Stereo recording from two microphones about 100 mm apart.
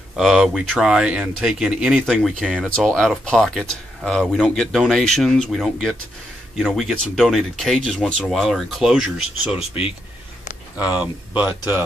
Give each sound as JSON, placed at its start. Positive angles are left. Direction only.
{"t": 0.1, "sound": "speech", "side_deg": -5}